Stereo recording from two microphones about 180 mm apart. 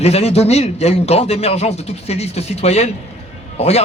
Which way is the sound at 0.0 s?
35° left (ahead or behind).